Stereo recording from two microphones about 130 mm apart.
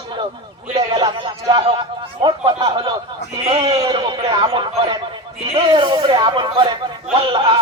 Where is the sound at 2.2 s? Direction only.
35° right (ahead or behind).